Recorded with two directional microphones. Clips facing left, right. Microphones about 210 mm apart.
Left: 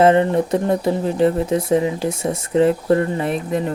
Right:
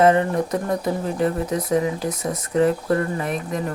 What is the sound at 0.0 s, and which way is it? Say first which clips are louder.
Speech: left 3 dB; 25° left (ahead or behind).